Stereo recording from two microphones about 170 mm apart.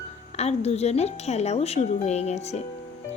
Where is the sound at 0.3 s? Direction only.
40° left (ahead or behind).